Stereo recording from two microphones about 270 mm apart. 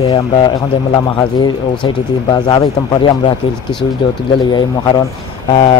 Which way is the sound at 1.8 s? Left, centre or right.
Centre.